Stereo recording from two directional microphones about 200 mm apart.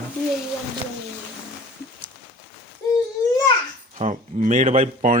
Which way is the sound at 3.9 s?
35° right (ahead or behind).